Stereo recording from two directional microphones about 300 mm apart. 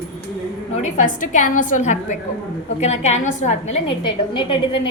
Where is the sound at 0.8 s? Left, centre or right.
Left.